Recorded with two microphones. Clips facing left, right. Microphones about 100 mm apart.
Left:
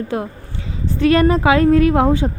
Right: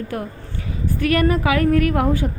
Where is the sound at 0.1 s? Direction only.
20° left (ahead or behind).